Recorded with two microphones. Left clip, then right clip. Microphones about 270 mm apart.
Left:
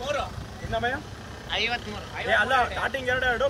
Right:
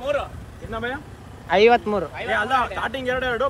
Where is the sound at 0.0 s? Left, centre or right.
Right.